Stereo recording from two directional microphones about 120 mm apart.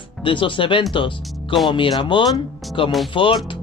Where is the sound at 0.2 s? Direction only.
45° left (ahead or behind).